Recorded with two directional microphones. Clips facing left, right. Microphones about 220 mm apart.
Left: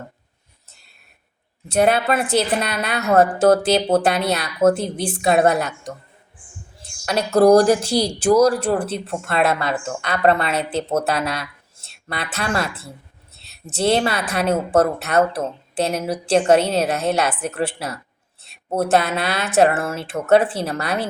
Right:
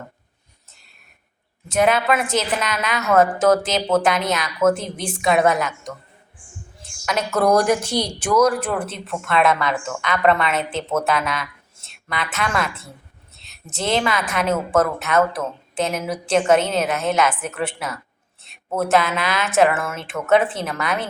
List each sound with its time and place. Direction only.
1.7 s a woman's voice: 35° left (ahead or behind)
7.0 s a woman's voice: 35° left (ahead or behind)